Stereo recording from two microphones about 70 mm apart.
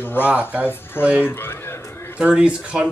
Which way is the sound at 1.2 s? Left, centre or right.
Left.